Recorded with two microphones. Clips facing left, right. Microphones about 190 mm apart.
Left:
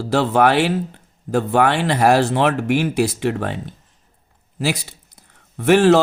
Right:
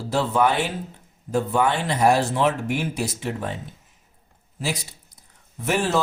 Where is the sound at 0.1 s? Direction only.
75° left (ahead or behind).